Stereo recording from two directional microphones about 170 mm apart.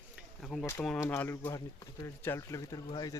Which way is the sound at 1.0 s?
15° left (ahead or behind).